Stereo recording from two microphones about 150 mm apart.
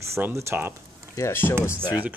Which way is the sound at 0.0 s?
15° right (ahead or behind).